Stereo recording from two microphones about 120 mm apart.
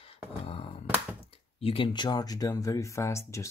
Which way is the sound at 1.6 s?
50° left (ahead or behind).